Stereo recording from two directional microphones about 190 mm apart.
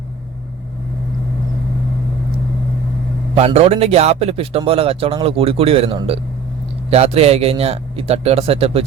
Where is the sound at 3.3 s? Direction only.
35° right (ahead or behind).